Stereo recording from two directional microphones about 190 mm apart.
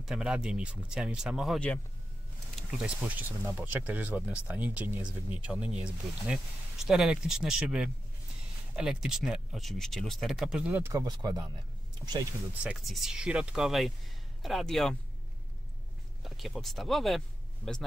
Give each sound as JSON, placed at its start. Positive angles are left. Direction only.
{"t": 0.0, "sound": "speech", "side_deg": -5}
{"t": 2.8, "sound": "speech", "side_deg": -10}
{"t": 10.7, "sound": "speech", "side_deg": -15}
{"t": 12.6, "sound": "speech", "side_deg": 0}
{"t": 16.2, "sound": "speech", "side_deg": 0}